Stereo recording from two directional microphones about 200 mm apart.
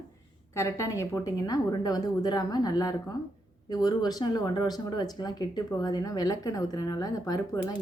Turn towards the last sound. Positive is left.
turn(degrees=20)  # may be behind; listen again after turning